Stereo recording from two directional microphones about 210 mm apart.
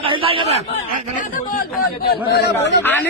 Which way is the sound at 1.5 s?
45° left (ahead or behind).